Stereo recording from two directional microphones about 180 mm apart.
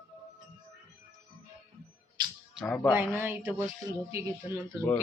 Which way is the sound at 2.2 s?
25° right (ahead or behind).